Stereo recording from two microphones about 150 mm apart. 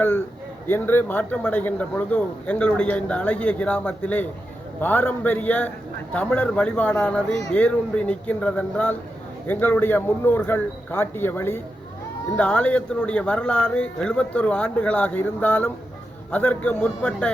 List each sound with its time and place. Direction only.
0.7 s a man's voice: 15° left (ahead or behind)